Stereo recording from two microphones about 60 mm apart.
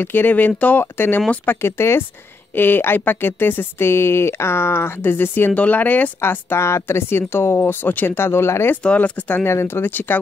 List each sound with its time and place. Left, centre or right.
0.0 s speech: left
5.5 s speech: left
6.2 s speech: left
8.8 s speech: left
9.4 s speech: left